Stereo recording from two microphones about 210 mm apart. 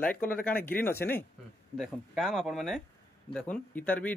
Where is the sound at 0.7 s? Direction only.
10° left (ahead or behind).